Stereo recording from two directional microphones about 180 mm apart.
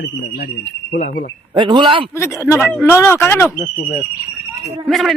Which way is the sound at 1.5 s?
25° right (ahead or behind).